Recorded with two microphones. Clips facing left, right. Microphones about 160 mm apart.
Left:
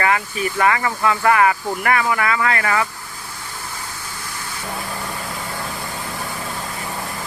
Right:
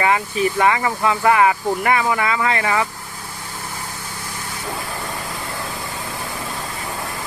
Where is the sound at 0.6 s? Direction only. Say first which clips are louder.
Left 2 dB; 15° right (ahead or behind).